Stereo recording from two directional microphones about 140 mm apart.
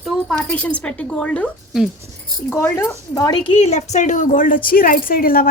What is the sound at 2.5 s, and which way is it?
Speech, 15° left (ahead or behind).